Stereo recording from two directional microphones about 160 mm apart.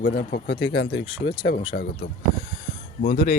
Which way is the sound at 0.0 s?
65° left (ahead or behind).